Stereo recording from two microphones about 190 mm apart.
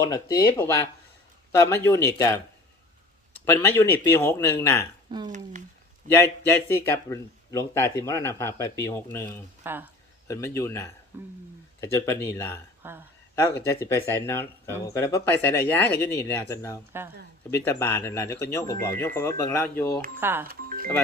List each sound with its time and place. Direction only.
0.0 s speech: 15° left (ahead or behind)
3.6 s speech: 15° left (ahead or behind)
5.1 s speech: 20° right (ahead or behind)
6.2 s speech: 15° left (ahead or behind)
9.6 s speech: 10° right (ahead or behind)
10.2 s speech: 15° left (ahead or behind)
11.1 s speech: 10° right (ahead or behind)
11.8 s speech: 15° left (ahead or behind)
12.8 s speech: 10° right (ahead or behind)
13.3 s speech: 15° left (ahead or behind)
20.1 s speech: 10° right (ahead or behind)
20.5 s music: 50° right (ahead or behind)